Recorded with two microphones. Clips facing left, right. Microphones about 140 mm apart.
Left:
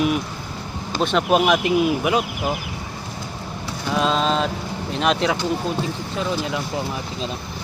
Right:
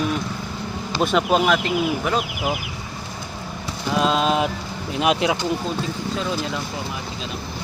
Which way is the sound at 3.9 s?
Centre (ahead or behind).